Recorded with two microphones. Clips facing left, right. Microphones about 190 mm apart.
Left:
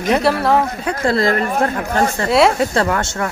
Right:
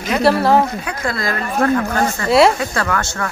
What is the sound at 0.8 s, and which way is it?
Speech, 30° left (ahead or behind).